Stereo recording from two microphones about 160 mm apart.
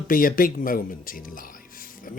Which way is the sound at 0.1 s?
60° left (ahead or behind).